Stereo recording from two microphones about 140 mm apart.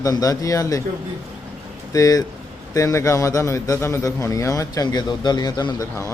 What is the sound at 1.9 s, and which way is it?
A man's voice, 25° left (ahead or behind).